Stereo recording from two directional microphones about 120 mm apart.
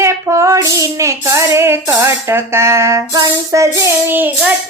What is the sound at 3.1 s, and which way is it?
Music, 30° right (ahead or behind).